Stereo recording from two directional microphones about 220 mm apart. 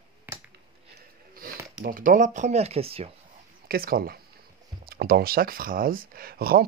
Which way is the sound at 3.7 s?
40° right (ahead or behind).